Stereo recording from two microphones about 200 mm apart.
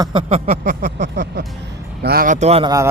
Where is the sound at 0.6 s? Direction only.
45° right (ahead or behind).